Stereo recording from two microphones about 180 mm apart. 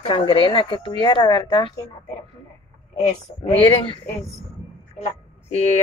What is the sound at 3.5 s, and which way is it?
Speech, 30° left (ahead or behind).